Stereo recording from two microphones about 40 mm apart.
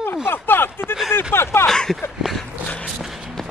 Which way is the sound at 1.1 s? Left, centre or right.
Left.